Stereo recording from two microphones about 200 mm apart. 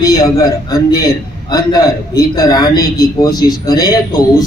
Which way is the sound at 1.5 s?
20° left (ahead or behind).